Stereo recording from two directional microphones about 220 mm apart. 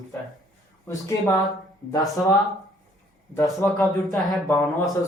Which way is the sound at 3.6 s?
15° left (ahead or behind).